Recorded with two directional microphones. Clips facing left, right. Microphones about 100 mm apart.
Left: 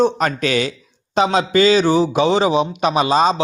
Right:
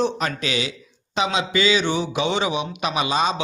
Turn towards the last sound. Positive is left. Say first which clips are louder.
# left 7 dB
turn(degrees=40)  # may be behind; listen again after turning